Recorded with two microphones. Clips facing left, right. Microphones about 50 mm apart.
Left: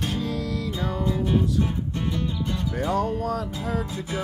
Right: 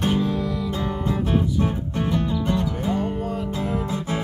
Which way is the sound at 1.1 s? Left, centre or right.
Right.